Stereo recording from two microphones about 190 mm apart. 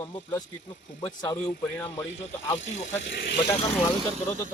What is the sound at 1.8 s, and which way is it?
Speech, 10° left (ahead or behind).